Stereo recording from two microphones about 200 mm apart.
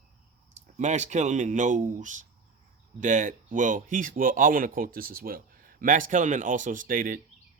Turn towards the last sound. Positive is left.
turn(degrees=-45)  # may be behind; listen again after turning